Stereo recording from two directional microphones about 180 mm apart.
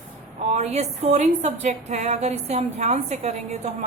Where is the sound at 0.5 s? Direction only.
35° right (ahead or behind).